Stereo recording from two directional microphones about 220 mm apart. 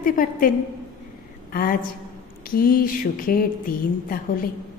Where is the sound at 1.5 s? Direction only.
40° left (ahead or behind).